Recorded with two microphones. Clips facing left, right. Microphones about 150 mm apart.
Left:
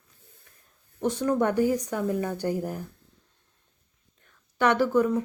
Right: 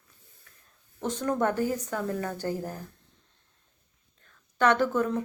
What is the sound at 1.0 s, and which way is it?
A woman's voice, 10° left (ahead or behind).